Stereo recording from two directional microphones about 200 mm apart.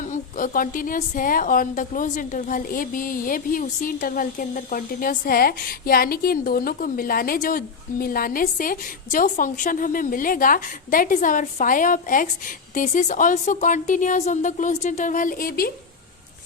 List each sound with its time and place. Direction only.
0.1 s a woman's voice: 45° left (ahead or behind)